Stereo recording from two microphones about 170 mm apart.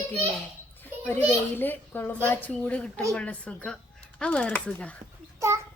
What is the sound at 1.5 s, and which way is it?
A woman's voice, 10° left (ahead or behind).